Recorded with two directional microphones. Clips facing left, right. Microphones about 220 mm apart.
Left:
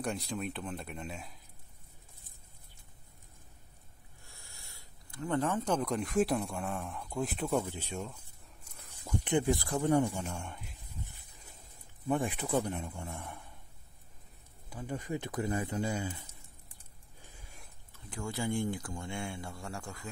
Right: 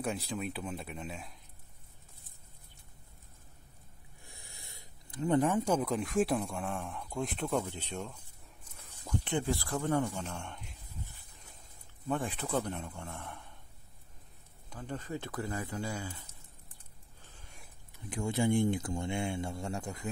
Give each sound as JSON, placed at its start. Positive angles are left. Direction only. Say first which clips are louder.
{"t": 0.0, "sound": "speech", "louder": "even", "side_deg": 0}
{"t": 4.2, "sound": "speech", "louder": "right 3 dB", "side_deg": -15}
{"t": 12.1, "sound": "speech", "louder": "left 2 dB", "side_deg": 15}
{"t": 14.7, "sound": "speech", "louder": "left 2 dB", "side_deg": 10}
{"t": 17.2, "sound": "a sound", "louder": "left 1 dB", "side_deg": 10}
{"t": 17.9, "sound": "speech", "louder": "right 5 dB", "side_deg": -20}